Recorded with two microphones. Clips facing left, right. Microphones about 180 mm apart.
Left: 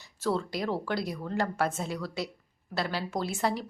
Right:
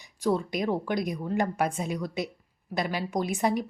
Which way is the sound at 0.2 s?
15° right (ahead or behind).